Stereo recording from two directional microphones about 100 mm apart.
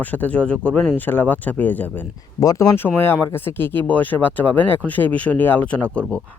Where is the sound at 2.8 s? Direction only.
20° left (ahead or behind).